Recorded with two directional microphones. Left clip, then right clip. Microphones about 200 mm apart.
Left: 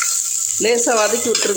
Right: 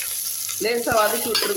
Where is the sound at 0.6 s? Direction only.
40° left (ahead or behind).